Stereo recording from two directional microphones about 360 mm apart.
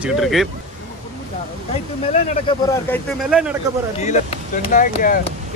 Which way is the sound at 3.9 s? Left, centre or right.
Centre.